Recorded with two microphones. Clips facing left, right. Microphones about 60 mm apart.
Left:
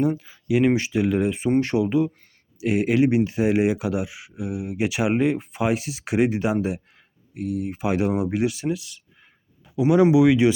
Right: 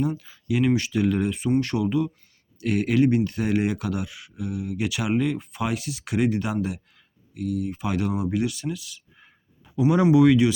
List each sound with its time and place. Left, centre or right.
0.2 s speech: centre
0.6 s speech: left
2.6 s speech: centre
9.2 s a sound: centre
10.0 s speech: centre